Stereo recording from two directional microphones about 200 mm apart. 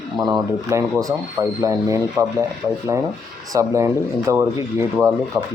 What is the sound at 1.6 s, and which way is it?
Speech, 15° right (ahead or behind).